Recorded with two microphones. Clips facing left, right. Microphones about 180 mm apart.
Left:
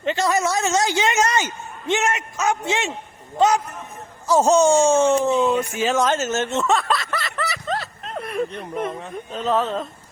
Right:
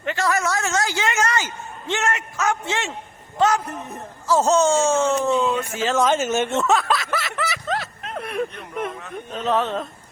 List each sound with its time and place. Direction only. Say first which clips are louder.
0.0 s a sound: left 2 dB; 20° left (ahead or behind)
3.3 s a man's voice: left 1 dB; 20° left (ahead or behind)
6.1 s snicker: right 1 dB; 10° right (ahead or behind)
9.3 s speech: even; centre (ahead or behind)